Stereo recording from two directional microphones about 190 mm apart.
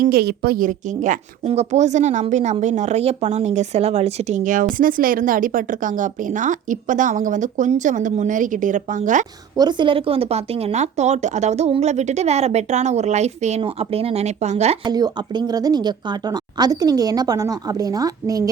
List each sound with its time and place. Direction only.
0.0 s speech: 55° right (ahead or behind)
9.6 s speech: 25° right (ahead or behind)
14.8 s speech: 20° right (ahead or behind)